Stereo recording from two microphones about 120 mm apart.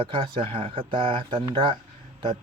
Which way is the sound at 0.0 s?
50° right (ahead or behind).